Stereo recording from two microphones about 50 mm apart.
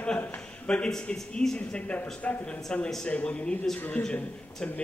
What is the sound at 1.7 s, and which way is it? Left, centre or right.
A man's voice, left.